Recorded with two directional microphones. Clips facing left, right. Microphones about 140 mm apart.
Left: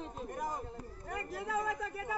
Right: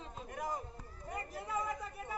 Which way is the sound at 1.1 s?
90° left.